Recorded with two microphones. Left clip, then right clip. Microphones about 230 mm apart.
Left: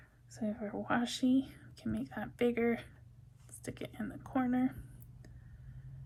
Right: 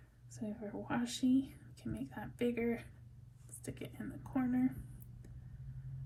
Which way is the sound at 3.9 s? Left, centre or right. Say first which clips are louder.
Left 4 dB; left.